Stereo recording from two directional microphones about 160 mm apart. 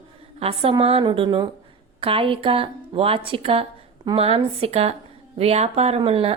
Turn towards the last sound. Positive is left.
turn(degrees=-35)  # may be behind; listen again after turning